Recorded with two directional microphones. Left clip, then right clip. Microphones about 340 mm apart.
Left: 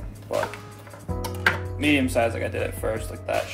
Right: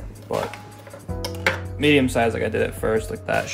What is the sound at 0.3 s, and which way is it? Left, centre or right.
Music, centre.